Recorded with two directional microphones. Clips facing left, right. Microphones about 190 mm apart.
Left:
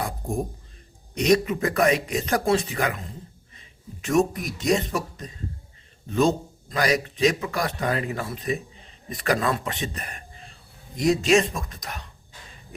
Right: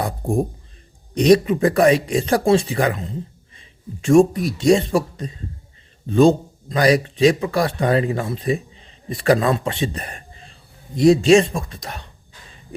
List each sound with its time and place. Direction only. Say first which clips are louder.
0.0 s speech: right 7 dB; 30° right (ahead or behind)
4.0 s speech: right 8 dB; 30° right (ahead or behind)